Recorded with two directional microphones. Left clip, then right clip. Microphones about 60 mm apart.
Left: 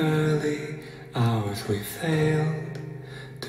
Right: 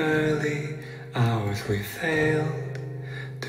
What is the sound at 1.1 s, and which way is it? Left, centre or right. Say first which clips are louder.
Mantra: even; left.